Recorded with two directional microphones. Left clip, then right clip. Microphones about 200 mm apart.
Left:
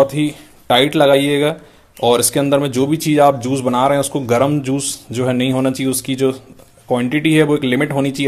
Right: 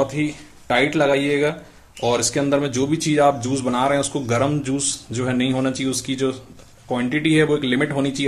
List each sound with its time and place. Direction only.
0.0 s speech: 40° left (ahead or behind)